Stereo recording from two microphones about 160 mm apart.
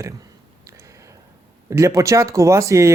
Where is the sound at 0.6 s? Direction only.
20° right (ahead or behind).